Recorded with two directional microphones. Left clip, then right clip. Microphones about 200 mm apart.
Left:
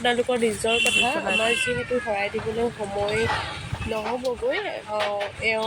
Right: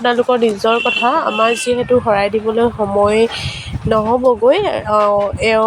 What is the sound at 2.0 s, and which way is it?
Speech, 30° right (ahead or behind).